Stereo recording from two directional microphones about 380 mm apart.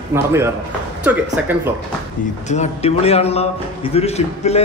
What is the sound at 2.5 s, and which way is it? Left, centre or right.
A man's voice, centre.